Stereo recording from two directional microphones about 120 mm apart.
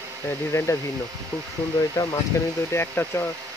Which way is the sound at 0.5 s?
25° left (ahead or behind).